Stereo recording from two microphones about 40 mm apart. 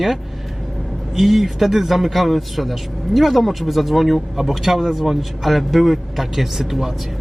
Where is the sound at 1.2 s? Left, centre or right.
Centre.